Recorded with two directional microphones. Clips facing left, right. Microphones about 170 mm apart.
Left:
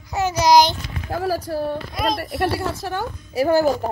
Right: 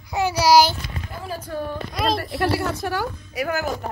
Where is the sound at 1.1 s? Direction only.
90° left.